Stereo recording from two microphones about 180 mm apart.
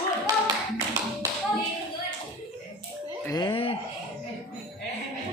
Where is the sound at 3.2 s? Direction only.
20° left (ahead or behind).